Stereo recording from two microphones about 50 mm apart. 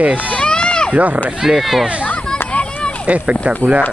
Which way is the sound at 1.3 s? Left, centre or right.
Centre.